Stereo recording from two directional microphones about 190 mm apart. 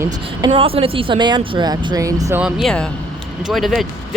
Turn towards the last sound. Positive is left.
turn(degrees=0)  # may be behind; listen again after turning